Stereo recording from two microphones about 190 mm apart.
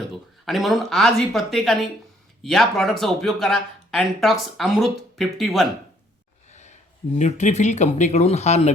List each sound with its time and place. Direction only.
0.4 s speech: centre (ahead or behind)
6.5 s a sound: 40° left (ahead or behind)
7.2 s speech: 40° left (ahead or behind)